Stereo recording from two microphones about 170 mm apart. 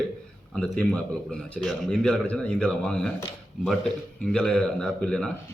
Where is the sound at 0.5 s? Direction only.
5° left (ahead or behind).